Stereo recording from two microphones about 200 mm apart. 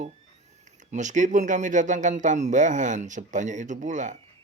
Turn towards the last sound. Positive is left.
turn(degrees=-40)  # may be behind; listen again after turning